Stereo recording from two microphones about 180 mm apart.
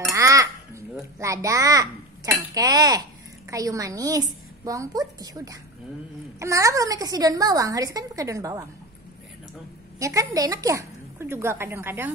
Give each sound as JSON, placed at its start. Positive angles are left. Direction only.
{"t": 0.1, "sound": "crow", "side_deg": -15}
{"t": 1.2, "sound": "a child's voice", "side_deg": -15}
{"t": 9.9, "sound": "a woman's voice", "side_deg": -15}